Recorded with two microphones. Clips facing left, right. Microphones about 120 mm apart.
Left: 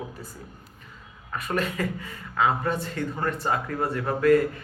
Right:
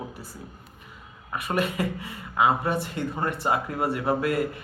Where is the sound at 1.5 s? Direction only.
15° right (ahead or behind).